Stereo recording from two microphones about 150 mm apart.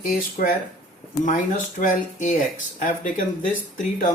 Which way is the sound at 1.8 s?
60° left (ahead or behind).